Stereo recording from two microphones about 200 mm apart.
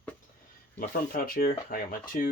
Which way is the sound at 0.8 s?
45° left (ahead or behind).